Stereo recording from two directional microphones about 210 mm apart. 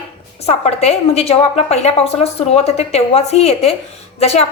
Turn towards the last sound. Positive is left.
turn(degrees=30)  # may be behind; listen again after turning